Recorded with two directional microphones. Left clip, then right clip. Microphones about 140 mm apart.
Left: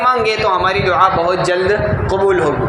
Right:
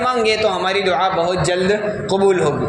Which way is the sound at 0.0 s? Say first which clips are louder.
Left 3 dB; 30° right (ahead or behind).